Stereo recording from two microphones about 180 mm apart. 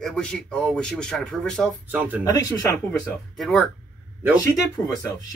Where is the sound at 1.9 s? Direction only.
10° right (ahead or behind).